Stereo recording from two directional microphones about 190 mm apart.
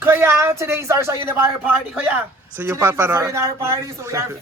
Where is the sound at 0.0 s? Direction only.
10° right (ahead or behind).